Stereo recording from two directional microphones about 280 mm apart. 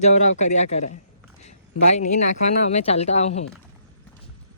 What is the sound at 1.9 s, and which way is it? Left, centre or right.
Speech, left.